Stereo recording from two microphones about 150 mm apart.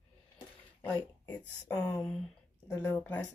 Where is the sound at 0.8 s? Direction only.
15° left (ahead or behind).